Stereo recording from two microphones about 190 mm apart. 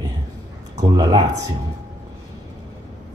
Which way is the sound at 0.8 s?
20° right (ahead or behind).